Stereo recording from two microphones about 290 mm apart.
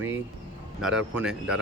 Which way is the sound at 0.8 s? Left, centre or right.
Centre.